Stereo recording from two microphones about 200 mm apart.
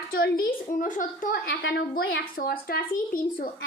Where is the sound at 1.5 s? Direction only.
55° left (ahead or behind).